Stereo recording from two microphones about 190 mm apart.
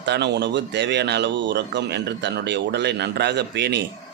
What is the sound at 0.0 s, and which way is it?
Speech, 65° right (ahead or behind).